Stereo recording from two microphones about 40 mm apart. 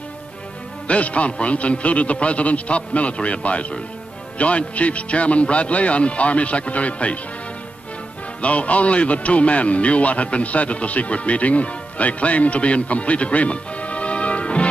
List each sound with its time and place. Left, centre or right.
0.8 s speech: left
8.4 s speech: left